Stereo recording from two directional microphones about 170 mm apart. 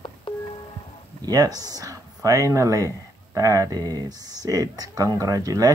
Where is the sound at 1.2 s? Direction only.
20° right (ahead or behind).